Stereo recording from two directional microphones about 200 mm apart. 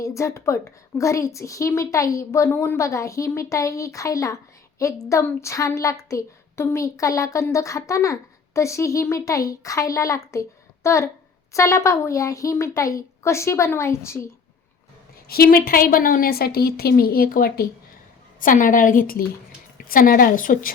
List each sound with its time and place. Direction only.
0.0 s speech: 15° left (ahead or behind)
15.3 s a woman's voice: 50° left (ahead or behind)